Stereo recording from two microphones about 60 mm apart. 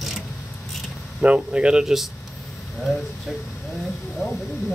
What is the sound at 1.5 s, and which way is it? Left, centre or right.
Speech, centre.